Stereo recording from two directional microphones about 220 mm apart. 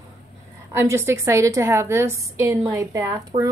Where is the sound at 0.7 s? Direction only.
10° right (ahead or behind).